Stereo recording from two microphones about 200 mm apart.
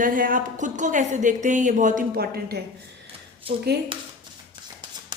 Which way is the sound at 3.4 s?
25° right (ahead or behind).